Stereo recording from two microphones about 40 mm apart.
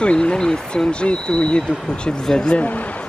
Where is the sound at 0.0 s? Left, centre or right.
Left.